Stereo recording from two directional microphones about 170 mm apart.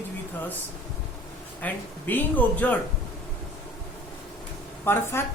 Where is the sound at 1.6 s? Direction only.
10° left (ahead or behind).